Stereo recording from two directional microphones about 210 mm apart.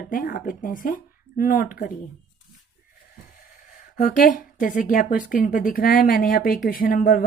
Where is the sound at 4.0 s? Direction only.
40° left (ahead or behind).